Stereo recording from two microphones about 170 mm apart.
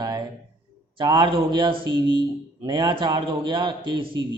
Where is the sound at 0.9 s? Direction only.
30° right (ahead or behind).